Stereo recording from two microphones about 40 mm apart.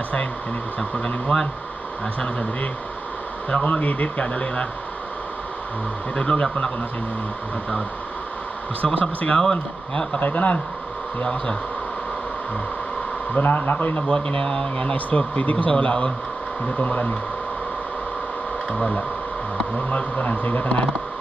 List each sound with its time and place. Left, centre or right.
0.7 s speech: left
3.4 s speech: left
6.1 s speech: left
9.2 s speech: left
10.2 s speech: left
13.3 s speech: left
14.0 s speech: left
16.6 s speech: left
18.7 s speech: left
19.9 s speech: left